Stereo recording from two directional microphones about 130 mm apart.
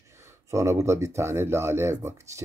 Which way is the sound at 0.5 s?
25° right (ahead or behind).